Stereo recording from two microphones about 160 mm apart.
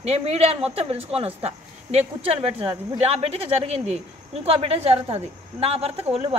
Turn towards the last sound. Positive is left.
turn(degrees=-35)  # may be behind; listen again after turning